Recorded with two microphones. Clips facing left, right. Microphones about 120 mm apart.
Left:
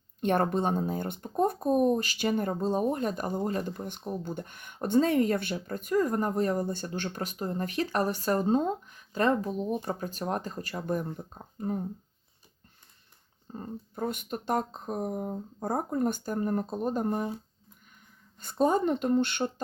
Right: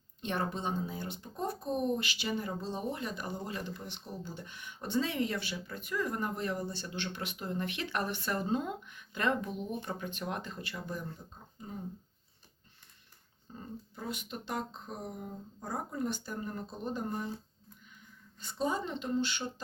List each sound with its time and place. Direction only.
0.2 s speech: 55° left (ahead or behind)
13.5 s speech: 50° left (ahead or behind)
18.3 s speech: 50° left (ahead or behind)